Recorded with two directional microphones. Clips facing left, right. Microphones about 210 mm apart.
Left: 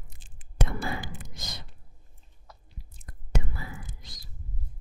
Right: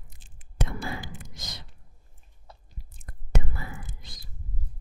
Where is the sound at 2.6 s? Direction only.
55° right (ahead or behind).